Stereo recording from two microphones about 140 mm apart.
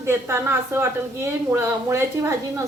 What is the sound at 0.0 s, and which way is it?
A woman's voice, 20° right (ahead or behind).